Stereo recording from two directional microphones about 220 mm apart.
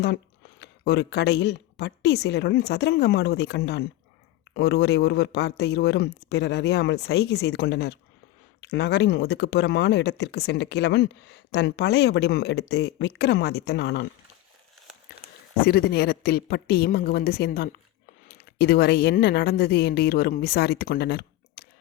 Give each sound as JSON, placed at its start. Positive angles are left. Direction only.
{"t": 0.6, "sound": "a woman's voice", "side_deg": 50}
{"t": 15.6, "sound": "a woman's voice", "side_deg": 45}